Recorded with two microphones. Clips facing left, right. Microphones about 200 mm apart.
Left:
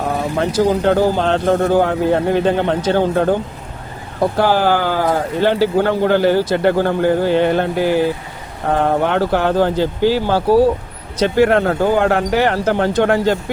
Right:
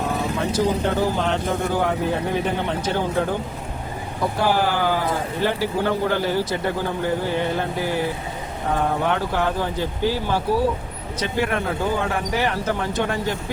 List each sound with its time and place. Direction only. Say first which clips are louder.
0.3 s speech: left 7 dB; 80° left
4.4 s speech: left 5 dB; 90° left
8.7 s speech: left 6 dB; 75° left (ahead or behind)